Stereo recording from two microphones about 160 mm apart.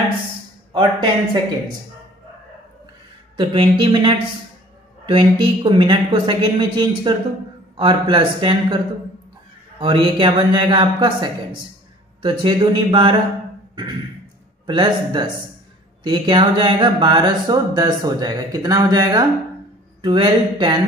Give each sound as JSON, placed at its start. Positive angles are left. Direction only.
{"t": 0.7, "sound": "speech", "side_deg": -30}
{"t": 3.3, "sound": "speech", "side_deg": -30}
{"t": 9.8, "sound": "speech", "side_deg": -35}
{"t": 14.7, "sound": "speech", "side_deg": -30}